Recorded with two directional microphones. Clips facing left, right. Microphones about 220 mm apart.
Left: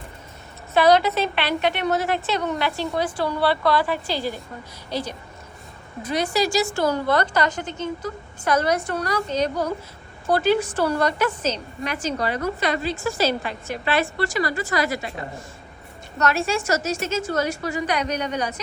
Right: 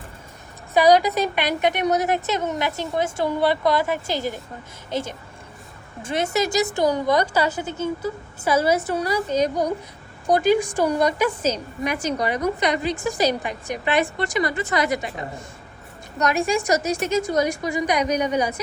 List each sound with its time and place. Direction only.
0.7 s a woman's voice: 10° right (ahead or behind)
6.0 s a woman's voice: 25° right (ahead or behind)
16.1 s a woman's voice: 15° right (ahead or behind)